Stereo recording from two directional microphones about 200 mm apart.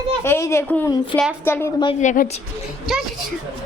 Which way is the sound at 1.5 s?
10° left (ahead or behind).